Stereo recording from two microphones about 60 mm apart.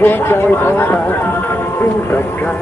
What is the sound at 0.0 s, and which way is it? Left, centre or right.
Speech, left.